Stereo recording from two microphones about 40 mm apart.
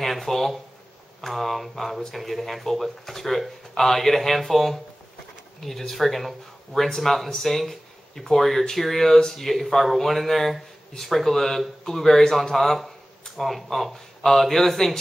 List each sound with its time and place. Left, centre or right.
0.0 s speech: centre